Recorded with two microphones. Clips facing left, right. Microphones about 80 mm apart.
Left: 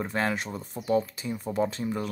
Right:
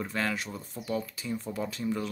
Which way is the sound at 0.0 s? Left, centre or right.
Left.